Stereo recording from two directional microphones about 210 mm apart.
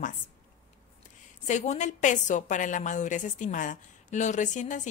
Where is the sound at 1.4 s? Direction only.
35° left (ahead or behind).